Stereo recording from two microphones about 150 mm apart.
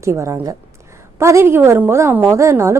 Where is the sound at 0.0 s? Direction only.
20° right (ahead or behind).